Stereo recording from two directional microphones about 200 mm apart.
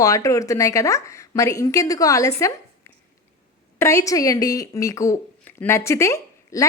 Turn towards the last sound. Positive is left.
turn(degrees=15)  # may be behind; listen again after turning